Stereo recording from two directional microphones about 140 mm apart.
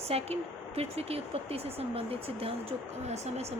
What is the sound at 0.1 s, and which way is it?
Speech, 45° right (ahead or behind).